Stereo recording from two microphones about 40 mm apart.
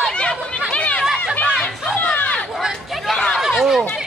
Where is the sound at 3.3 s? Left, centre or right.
Centre.